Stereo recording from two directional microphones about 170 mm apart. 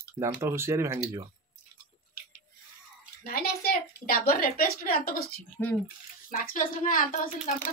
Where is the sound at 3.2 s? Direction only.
65° left (ahead or behind).